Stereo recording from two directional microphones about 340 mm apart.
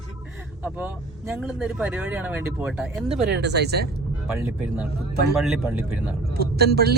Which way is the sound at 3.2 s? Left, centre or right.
Right.